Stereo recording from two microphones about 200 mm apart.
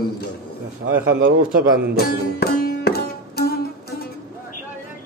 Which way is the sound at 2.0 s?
50° left (ahead or behind).